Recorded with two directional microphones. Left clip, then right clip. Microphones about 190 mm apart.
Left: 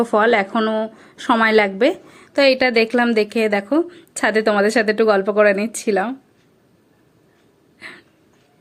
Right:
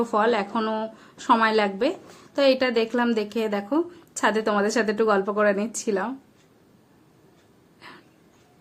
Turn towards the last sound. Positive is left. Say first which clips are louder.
# left 8 dB
turn(degrees=20)  # may be behind; listen again after turning